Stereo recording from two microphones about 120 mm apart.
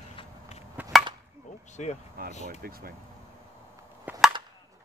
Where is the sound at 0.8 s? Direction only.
15° right (ahead or behind).